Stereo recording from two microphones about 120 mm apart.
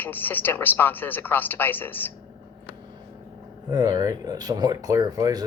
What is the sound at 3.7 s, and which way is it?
Speech, 35° right (ahead or behind).